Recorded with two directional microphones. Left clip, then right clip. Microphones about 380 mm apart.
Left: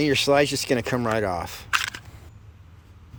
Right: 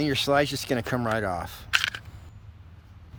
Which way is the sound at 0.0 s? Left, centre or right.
Centre.